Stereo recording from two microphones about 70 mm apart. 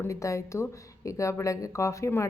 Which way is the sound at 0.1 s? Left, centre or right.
Left.